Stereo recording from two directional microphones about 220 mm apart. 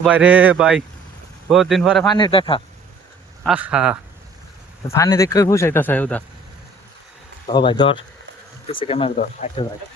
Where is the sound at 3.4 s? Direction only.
5° right (ahead or behind).